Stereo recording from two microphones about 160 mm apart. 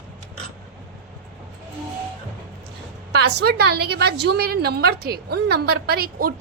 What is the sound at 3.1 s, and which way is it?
A woman's voice, 90° right.